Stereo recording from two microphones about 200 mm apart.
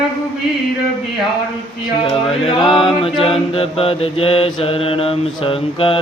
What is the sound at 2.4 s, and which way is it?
Mantra, 25° left (ahead or behind).